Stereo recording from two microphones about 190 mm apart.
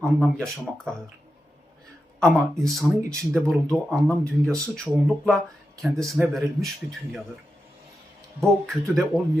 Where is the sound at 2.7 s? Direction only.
Centre (ahead or behind).